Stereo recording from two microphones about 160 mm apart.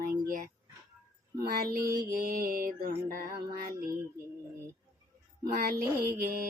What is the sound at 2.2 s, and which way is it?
Mantra, 65° right (ahead or behind).